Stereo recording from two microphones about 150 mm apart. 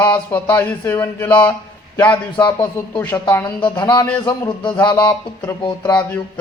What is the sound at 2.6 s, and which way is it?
Speech, 20° left (ahead or behind).